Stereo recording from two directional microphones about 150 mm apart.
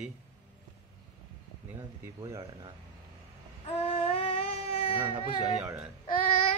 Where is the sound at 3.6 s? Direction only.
40° left (ahead or behind).